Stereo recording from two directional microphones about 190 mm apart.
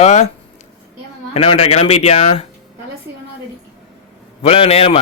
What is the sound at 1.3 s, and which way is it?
Speech, 30° left (ahead or behind).